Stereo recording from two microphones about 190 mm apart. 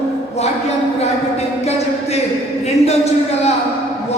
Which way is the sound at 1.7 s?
35° left (ahead or behind).